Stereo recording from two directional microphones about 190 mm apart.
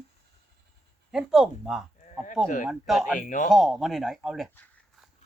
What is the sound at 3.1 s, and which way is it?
Speech, 45° left (ahead or behind).